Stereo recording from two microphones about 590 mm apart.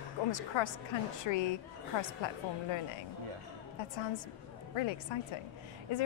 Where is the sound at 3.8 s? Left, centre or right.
Left.